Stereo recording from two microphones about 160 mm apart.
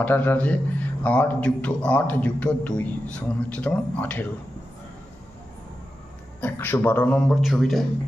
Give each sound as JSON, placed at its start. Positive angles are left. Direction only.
{"t": 0.0, "sound": "a man's voice", "side_deg": 10}
{"t": 6.4, "sound": "a man's voice", "side_deg": 10}